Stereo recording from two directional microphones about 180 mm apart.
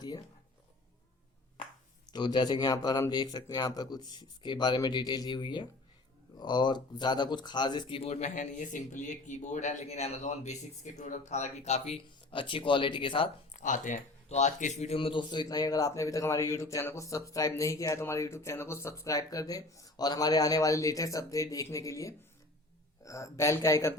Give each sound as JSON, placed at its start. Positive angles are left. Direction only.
{"t": 0.0, "sound": "a sound", "side_deg": 25}
{"t": 2.1, "sound": "speech", "side_deg": 25}
{"t": 13.5, "sound": "speech", "side_deg": 45}